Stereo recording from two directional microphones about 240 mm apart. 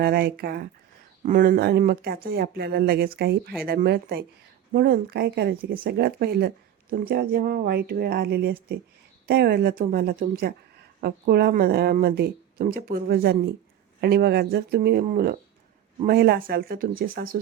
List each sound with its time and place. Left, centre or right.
0.0 s speech: right